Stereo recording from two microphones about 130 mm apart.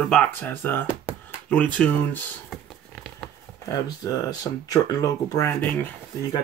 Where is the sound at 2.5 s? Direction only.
Centre (ahead or behind).